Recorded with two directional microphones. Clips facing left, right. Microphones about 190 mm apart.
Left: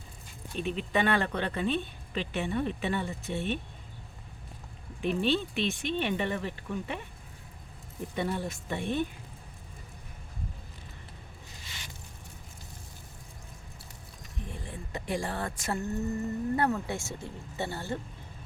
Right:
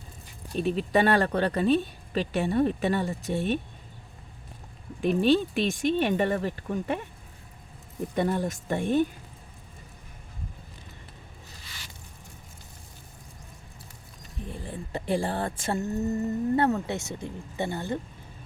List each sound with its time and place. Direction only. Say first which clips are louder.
0.5 s speech: right 6 dB; 40° right (ahead or behind)
5.0 s speech: right 6 dB; 40° right (ahead or behind)
8.1 s speech: right 6 dB; 45° right (ahead or behind)
14.5 s speech: right 5 dB; 35° right (ahead or behind); by 18.0 s 20° right (ahead or behind)